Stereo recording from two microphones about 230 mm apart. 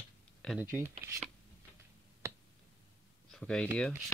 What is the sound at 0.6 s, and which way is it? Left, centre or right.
Speech, centre.